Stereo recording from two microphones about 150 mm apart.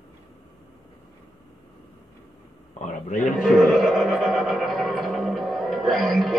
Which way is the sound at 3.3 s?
Centre (ahead or behind).